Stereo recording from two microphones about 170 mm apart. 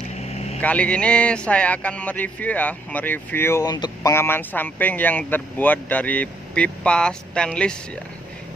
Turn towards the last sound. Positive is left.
turn(degrees=5)  # may be behind; listen again after turning